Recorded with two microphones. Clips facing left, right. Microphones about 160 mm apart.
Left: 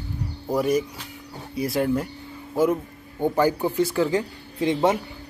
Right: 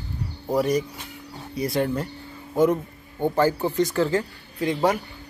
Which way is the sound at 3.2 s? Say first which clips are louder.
Even; 15° left (ahead or behind).